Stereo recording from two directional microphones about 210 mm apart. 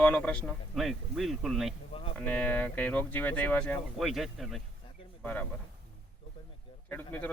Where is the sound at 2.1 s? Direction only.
5° left (ahead or behind).